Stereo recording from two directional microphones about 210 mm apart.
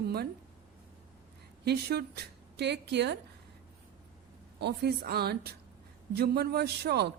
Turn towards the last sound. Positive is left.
turn(degrees=-50)  # may be behind; listen again after turning